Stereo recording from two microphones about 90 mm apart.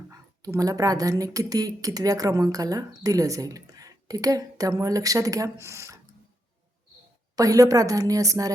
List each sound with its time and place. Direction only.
0.1 s speech: 40° right (ahead or behind)
7.3 s speech: 40° right (ahead or behind)